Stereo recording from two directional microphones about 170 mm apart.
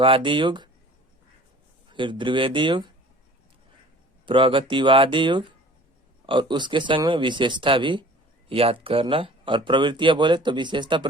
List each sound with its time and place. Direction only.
0.0 s speech: 30° right (ahead or behind)
1.9 s speech: 30° right (ahead or behind)
4.3 s speech: 30° right (ahead or behind)